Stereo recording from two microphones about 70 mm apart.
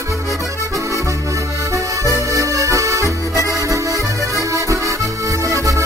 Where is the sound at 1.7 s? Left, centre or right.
Right.